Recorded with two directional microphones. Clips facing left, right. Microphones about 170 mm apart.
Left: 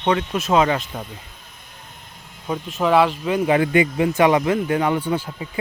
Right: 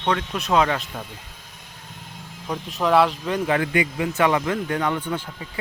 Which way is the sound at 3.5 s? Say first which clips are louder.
Left 6 dB; 25° left (ahead or behind).